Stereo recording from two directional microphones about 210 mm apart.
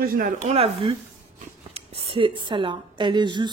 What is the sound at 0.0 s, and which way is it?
Speech, 45° right (ahead or behind).